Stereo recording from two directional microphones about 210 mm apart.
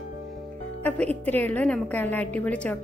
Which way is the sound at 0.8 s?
5° left (ahead or behind).